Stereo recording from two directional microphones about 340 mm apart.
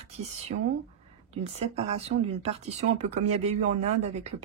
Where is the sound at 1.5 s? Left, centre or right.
Centre.